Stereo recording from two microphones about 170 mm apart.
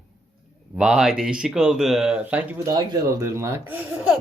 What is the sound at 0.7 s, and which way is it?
Speech, 5° right (ahead or behind).